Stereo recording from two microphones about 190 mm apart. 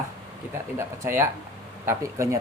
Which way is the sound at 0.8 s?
15° right (ahead or behind).